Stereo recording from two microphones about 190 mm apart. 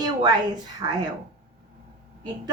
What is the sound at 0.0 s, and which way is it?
Speech, 20° right (ahead or behind).